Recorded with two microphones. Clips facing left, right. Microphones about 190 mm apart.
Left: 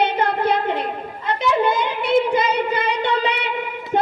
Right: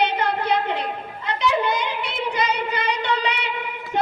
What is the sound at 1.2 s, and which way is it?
Child singing, 50° left (ahead or behind).